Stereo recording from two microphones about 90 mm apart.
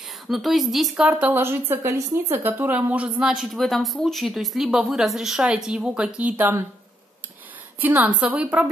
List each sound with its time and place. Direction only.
0.3 s a woman's voice: centre (ahead or behind)
1.0 s a woman's voice: 20° right (ahead or behind)
7.8 s a woman's voice: 20° right (ahead or behind)